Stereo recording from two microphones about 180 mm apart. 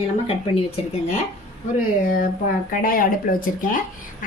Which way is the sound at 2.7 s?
50° left (ahead or behind).